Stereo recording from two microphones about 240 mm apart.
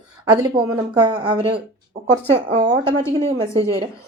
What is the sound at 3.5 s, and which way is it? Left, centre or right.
Speech, centre.